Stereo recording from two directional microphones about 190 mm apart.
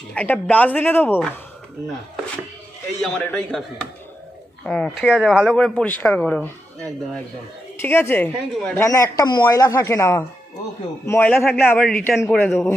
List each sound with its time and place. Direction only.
0.1 s speech: 5° left (ahead or behind)
3.0 s speech: 5° left (ahead or behind)
4.6 s speech: 5° left (ahead or behind)
8.8 s speech: 15° left (ahead or behind)